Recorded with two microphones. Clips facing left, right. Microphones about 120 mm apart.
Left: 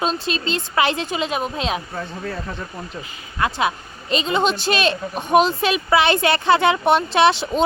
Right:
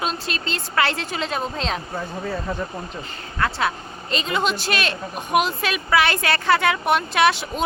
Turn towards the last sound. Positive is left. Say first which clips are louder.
# left 3 dB
turn(degrees=25)  # may be behind; listen again after turning